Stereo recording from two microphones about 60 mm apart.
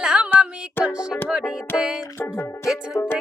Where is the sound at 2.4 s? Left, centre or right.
Left.